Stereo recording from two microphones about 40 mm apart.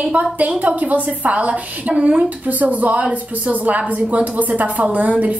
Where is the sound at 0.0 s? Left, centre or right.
Right.